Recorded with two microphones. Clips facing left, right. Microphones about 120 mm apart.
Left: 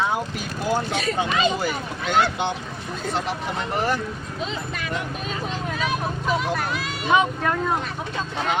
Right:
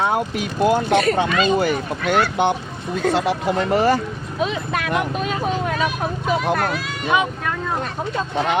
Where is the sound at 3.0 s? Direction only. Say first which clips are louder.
Right 8 dB; 70° right (ahead or behind); by 4.0 s 90° right.